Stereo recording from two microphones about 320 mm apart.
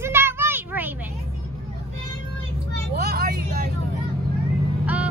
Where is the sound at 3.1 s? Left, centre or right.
Right.